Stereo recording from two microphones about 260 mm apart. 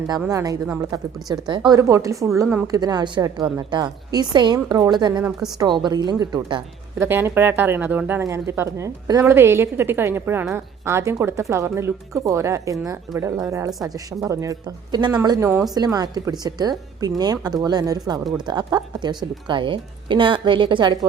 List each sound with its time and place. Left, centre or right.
0.2 s a woman's voice: centre